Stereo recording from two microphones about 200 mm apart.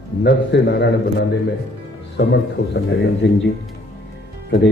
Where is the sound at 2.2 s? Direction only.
60° left (ahead or behind).